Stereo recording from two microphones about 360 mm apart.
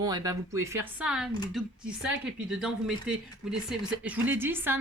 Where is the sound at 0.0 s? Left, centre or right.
Centre.